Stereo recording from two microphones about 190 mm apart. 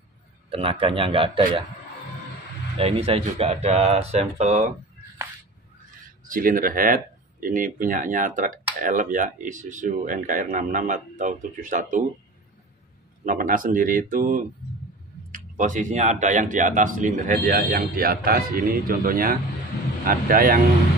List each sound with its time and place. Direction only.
0.5 s a man's voice: 30° right (ahead or behind)
2.8 s speech: 30° right (ahead or behind)
6.2 s speech: 45° right (ahead or behind)
13.2 s speech: 45° right (ahead or behind)